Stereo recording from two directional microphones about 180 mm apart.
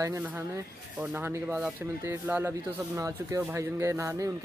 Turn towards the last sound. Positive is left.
turn(degrees=-15)  # may be behind; listen again after turning